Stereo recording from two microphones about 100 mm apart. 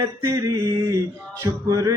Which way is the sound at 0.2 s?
30° right (ahead or behind).